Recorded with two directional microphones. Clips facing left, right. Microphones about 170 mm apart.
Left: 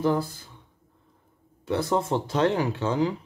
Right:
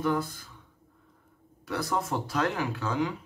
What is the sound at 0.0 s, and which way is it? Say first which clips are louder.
Speech: left 4 dB; 30° left (ahead or behind).